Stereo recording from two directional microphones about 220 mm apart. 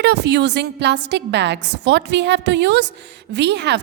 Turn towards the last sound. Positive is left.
turn(degrees=-50)  # may be behind; listen again after turning